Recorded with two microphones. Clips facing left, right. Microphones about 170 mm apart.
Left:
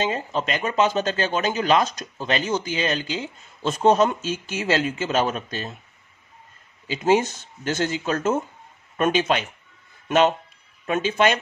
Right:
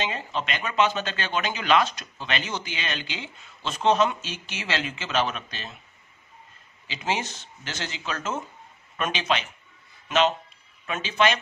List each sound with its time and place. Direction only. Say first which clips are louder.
0.0 s speech: left 5 dB; 45° left (ahead or behind)
6.9 s speech: left 10 dB; 45° left (ahead or behind)